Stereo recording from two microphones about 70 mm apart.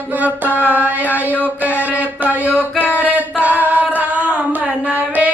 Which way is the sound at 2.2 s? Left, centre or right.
Right.